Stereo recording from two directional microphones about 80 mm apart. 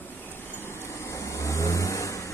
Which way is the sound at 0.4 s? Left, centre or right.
Left.